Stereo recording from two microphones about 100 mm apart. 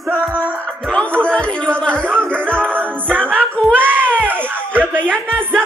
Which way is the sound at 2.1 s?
20° right (ahead or behind).